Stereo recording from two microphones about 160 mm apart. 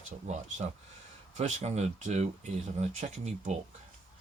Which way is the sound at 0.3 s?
45° right (ahead or behind).